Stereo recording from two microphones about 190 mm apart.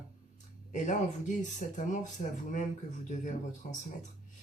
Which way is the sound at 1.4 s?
40° left (ahead or behind).